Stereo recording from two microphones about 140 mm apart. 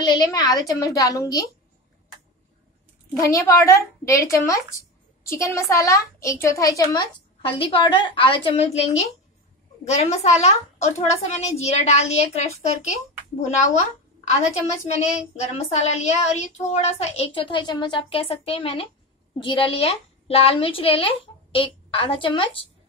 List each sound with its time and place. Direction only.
0.0 s a woman's voice: 25° left (ahead or behind)
3.2 s a woman's voice: 20° left (ahead or behind)
5.2 s a woman's voice: 20° left (ahead or behind)
6.8 s a woman's voice: 35° left (ahead or behind); by 12.9 s 50° left (ahead or behind)
14.3 s a woman's voice: 50° left (ahead or behind)